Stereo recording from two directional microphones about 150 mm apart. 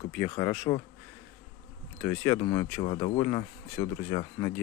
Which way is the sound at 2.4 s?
25° left (ahead or behind).